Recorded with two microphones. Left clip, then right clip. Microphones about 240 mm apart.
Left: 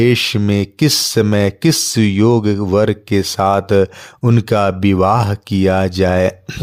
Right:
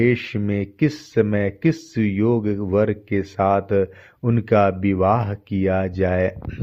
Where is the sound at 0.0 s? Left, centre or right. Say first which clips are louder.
Left 7 dB; left.